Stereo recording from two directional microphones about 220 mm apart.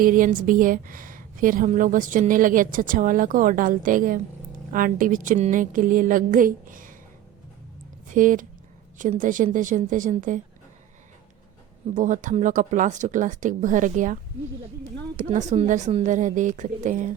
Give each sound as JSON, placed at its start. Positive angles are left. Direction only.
{"t": 0.0, "sound": "a woman's voice", "side_deg": -40}
{"t": 8.0, "sound": "a woman's voice", "side_deg": -35}
{"t": 11.9, "sound": "a woman's voice", "side_deg": -35}
{"t": 15.2, "sound": "a woman's voice", "side_deg": -35}